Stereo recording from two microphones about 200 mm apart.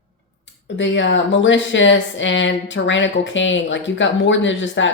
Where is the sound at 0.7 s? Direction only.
65° left (ahead or behind).